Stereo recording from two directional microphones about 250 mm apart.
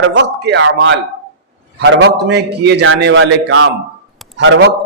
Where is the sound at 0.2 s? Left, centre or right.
Right.